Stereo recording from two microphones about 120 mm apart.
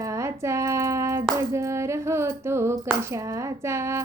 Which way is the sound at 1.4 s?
25° right (ahead or behind).